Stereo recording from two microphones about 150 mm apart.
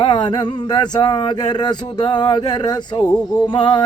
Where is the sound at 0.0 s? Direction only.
30° left (ahead or behind).